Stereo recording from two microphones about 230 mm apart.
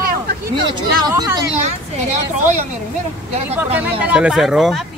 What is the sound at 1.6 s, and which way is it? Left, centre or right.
Speech, right.